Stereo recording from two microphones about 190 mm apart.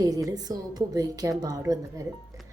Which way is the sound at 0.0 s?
15° right (ahead or behind).